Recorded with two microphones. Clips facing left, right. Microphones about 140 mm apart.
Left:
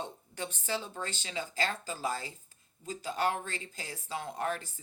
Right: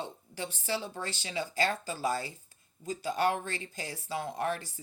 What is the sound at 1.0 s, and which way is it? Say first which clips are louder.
Speech: right 2 dB; 35° right (ahead or behind).